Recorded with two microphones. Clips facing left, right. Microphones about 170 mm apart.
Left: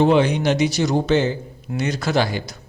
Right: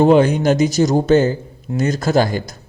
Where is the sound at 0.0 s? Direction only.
45° right (ahead or behind).